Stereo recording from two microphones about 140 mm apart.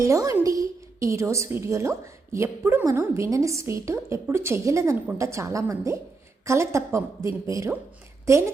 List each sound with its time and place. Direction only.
0.0 s a woman's voice: 25° right (ahead or behind)